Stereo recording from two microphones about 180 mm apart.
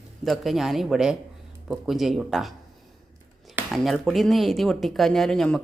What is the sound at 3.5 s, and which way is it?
Speech, centre (ahead or behind).